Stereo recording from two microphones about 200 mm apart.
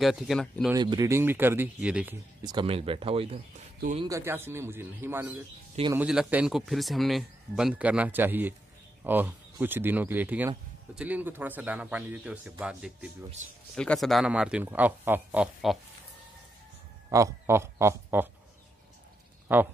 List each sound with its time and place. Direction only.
0.0 s speech: centre (ahead or behind)
0.7 s a man's voice: 20° right (ahead or behind)
2.4 s speech: 25° right (ahead or behind)
4.1 s a man's voice: 10° right (ahead or behind)
17.1 s a man's voice: 15° right (ahead or behind)
19.4 s a sound: 10° right (ahead or behind)